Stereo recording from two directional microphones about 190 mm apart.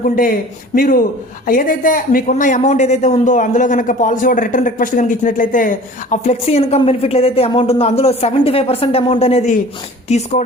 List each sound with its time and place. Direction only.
0.0 s a man's voice: 45° left (ahead or behind)